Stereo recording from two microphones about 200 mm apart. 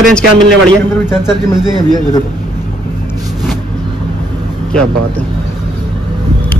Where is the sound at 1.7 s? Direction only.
20° right (ahead or behind).